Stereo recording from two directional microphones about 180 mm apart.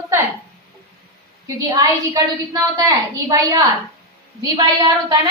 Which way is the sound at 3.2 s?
15° right (ahead or behind).